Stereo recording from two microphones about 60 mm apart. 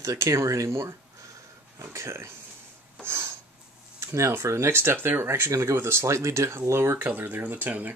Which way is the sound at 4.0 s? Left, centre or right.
Right.